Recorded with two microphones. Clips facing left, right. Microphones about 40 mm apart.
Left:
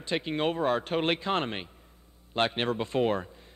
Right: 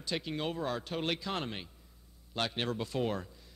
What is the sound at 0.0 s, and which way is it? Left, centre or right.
A man's voice, left.